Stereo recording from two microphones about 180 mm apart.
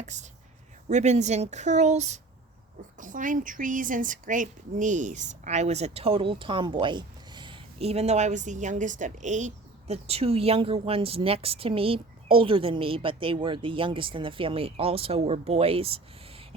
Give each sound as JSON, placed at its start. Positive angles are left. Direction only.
{"t": 0.0, "sound": "a woman's voice", "side_deg": -40}